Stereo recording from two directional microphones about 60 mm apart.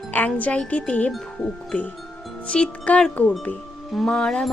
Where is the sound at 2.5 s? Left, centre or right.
Centre.